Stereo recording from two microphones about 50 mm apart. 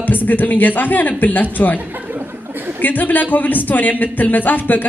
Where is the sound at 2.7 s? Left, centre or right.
Left.